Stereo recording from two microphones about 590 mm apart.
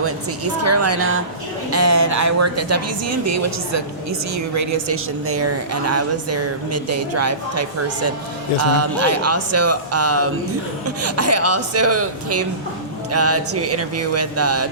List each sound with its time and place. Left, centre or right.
0.6 s speech: right